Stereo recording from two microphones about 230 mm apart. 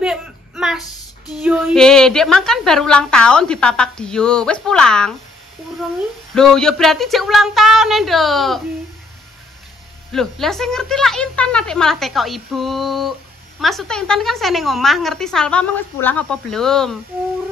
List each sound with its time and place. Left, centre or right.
0.0 s a sound: centre
1.4 s a woman's voice: centre
6.3 s a woman's voice: centre
10.1 s a woman's voice: centre